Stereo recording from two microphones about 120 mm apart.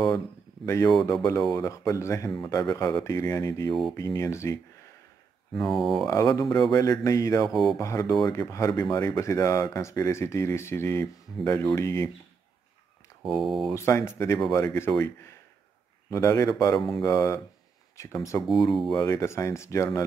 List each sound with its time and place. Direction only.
0.7 s speech: 25° left (ahead or behind)
5.7 s speech: centre (ahead or behind)
6.0 s speech: 30° left (ahead or behind)
7.4 s speech: centre (ahead or behind)
7.7 s speech: 25° left (ahead or behind)
13.2 s speech: centre (ahead or behind)
13.7 s speech: 25° left (ahead or behind)
18.5 s speech: centre (ahead or behind)
18.9 s speech: 25° left (ahead or behind)